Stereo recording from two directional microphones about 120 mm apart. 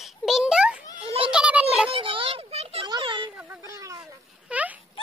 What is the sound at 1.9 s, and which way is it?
Speech, 50° right (ahead or behind).